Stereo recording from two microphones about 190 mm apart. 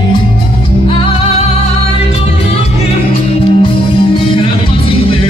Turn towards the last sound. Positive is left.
turn(degrees=25)  # may be behind; listen again after turning